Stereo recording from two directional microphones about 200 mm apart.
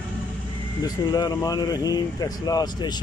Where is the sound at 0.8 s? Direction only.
20° left (ahead or behind).